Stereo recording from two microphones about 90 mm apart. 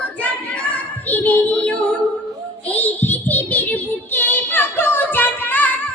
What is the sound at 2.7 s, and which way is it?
Child singing, 20° left (ahead or behind).